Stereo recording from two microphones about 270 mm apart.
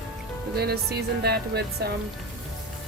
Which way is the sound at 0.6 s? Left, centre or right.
Right.